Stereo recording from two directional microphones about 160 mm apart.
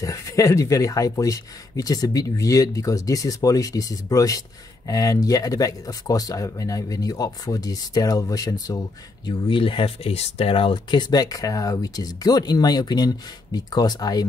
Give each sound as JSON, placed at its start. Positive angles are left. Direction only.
{"t": 0.0, "sound": "speech", "side_deg": 20}